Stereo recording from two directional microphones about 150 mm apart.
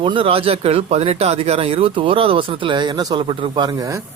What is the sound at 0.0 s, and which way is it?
Speech, 35° right (ahead or behind).